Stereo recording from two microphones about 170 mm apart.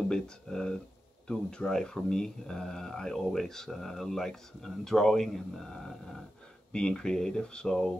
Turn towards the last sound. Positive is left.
turn(degrees=5)  # may be behind; listen again after turning